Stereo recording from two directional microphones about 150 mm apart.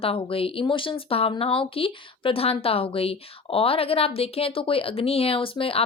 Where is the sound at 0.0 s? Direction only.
40° left (ahead or behind).